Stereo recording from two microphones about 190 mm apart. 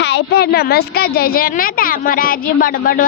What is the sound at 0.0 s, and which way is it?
A woman's voice, 65° left (ahead or behind).